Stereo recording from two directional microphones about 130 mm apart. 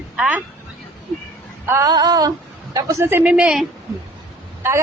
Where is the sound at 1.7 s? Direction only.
25° right (ahead or behind).